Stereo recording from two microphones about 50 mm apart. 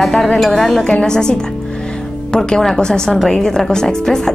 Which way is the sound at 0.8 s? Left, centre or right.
Centre.